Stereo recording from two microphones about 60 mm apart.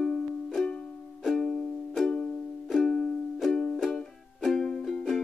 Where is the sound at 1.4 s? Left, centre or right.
Centre.